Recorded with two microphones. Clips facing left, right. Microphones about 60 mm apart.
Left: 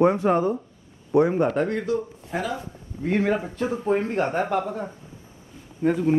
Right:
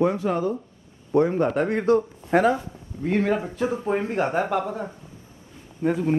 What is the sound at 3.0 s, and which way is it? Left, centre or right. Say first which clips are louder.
Speech: even; centre.